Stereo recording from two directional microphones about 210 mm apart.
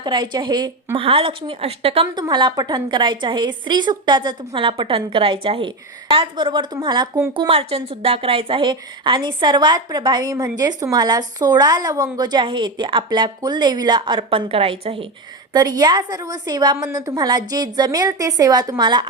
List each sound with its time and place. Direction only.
0.0 s a woman's voice: 20° right (ahead or behind)